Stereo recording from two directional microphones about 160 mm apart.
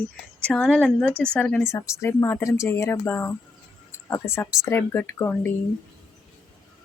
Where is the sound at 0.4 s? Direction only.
5° left (ahead or behind).